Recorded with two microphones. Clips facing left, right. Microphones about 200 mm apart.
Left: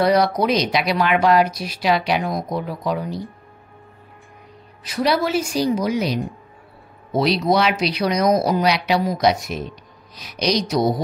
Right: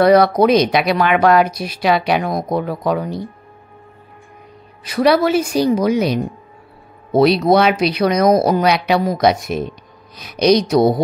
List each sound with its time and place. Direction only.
0.0 s speech: 55° right (ahead or behind)
4.8 s speech: 60° right (ahead or behind)